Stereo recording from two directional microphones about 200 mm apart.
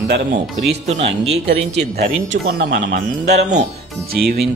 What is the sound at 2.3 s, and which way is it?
Speech, 55° right (ahead or behind).